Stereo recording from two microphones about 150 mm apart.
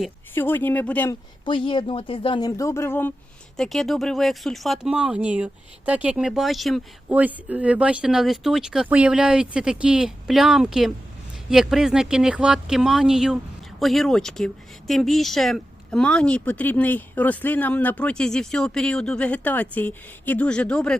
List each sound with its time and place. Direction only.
0.3 s speech: 15° left (ahead or behind)
1.5 s speech: 35° left (ahead or behind); by 3.1 s 15° left (ahead or behind)
3.6 s speech: centre (ahead or behind)
7.1 s speech: 10° right (ahead or behind); by 20.9 s 5° left (ahead or behind)